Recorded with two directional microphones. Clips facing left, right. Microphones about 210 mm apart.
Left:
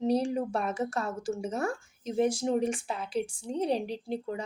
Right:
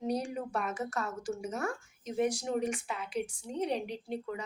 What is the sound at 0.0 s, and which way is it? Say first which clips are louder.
Speech: left 6 dB; 30° left (ahead or behind).